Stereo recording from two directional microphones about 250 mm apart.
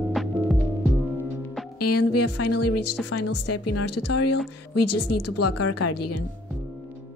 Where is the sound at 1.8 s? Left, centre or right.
Left.